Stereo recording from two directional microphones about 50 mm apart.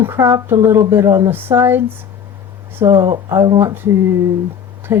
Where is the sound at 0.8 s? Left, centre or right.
Right.